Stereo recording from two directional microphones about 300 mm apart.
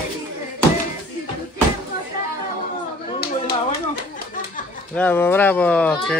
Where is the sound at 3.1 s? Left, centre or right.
Left.